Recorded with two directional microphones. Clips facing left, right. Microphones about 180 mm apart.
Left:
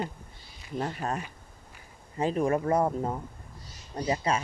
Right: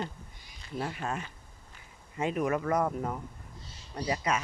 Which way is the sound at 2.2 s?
30° left (ahead or behind).